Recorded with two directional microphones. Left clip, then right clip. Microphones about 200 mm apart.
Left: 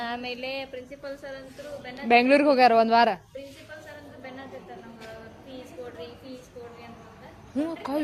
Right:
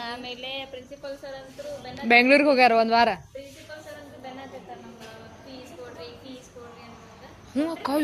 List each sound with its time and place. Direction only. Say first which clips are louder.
0.0 s a sound: left 2 dB; 60° left (ahead or behind)
2.0 s speech: right 2 dB; centre (ahead or behind)
7.5 s speech: right 3 dB; 5° right (ahead or behind)